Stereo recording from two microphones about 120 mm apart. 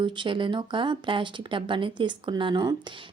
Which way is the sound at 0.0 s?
45° right (ahead or behind).